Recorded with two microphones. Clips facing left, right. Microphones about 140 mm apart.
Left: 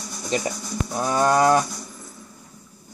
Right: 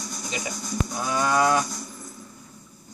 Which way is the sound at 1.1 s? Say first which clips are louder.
Left 4 dB; 45° left (ahead or behind).